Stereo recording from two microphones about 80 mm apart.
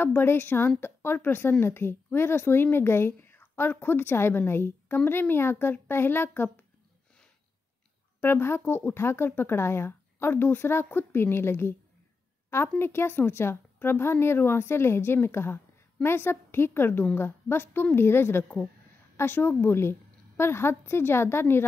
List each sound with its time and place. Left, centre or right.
0.0 s a woman's voice: left
8.2 s a woman's voice: left
12.7 s a woman's voice: left